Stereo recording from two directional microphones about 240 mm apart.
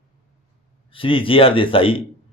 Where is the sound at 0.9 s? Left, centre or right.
Left.